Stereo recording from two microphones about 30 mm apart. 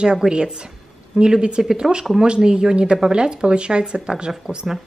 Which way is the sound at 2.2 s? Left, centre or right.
Right.